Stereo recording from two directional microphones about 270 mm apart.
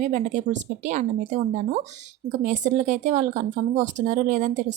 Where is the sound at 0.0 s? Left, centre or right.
Right.